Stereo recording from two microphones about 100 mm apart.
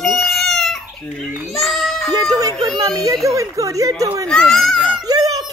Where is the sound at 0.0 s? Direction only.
Centre (ahead or behind).